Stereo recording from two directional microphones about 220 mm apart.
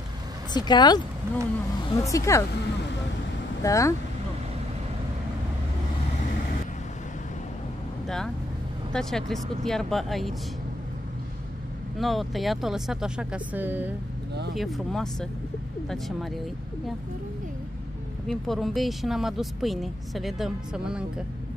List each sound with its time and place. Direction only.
0.5 s speech: 20° left (ahead or behind)
3.6 s speech: 15° left (ahead or behind)
8.9 s speech: centre (ahead or behind)
12.0 s speech: centre (ahead or behind)
18.3 s speech: centre (ahead or behind)